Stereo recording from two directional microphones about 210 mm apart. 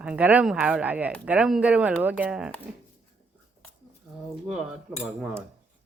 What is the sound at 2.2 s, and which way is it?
Cutlery, 5° right (ahead or behind).